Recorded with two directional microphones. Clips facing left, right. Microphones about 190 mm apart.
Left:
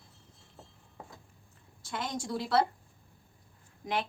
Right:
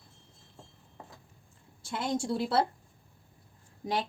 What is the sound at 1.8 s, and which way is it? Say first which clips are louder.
Speech: right 5 dB; 25° right (ahead or behind).